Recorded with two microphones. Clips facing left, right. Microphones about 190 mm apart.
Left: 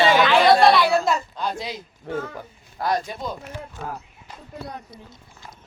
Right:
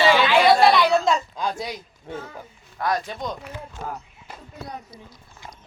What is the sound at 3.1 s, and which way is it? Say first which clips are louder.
Speech: even; 5° left (ahead or behind).